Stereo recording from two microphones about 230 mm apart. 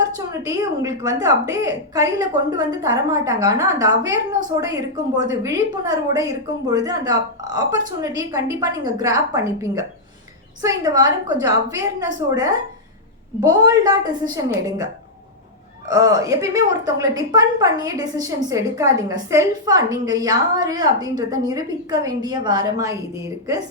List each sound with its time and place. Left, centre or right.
0.2 s a woman's voice: centre
15.9 s a woman's voice: centre